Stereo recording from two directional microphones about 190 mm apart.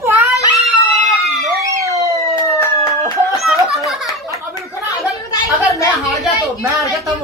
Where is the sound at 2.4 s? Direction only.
15° left (ahead or behind).